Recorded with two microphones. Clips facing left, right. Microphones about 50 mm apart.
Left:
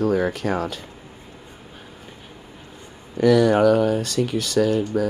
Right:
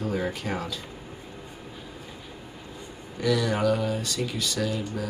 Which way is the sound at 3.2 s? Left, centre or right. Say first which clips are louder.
Left 9 dB; left.